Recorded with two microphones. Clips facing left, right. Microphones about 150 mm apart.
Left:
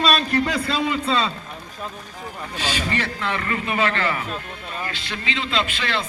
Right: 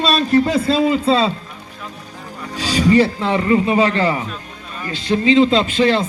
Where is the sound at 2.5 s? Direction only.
35° right (ahead or behind); by 4.2 s 20° right (ahead or behind).